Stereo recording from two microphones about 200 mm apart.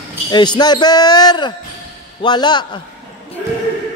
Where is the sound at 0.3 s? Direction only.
20° left (ahead or behind).